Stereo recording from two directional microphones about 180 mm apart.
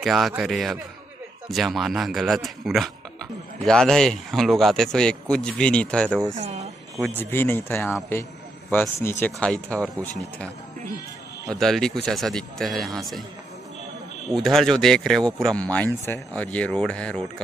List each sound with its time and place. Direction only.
0.0 s speech: centre (ahead or behind)
6.3 s speech: 40° right (ahead or behind)
7.0 s a man's voice: 10° left (ahead or behind)
11.5 s speech: centre (ahead or behind)
14.3 s speech: centre (ahead or behind)